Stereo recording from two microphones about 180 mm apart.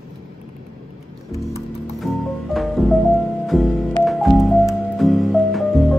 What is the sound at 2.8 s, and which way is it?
Music, centre (ahead or behind).